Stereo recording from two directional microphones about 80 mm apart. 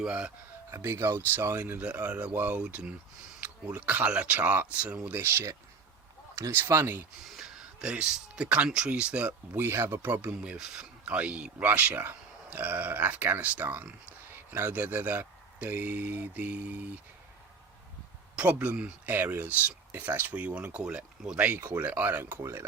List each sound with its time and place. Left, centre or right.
0.0 s speech: centre
0.7 s speech: right
5.1 s speech: right
7.3 s speech: centre
9.6 s speech: right
10.4 s speech: centre
18.3 s speech: centre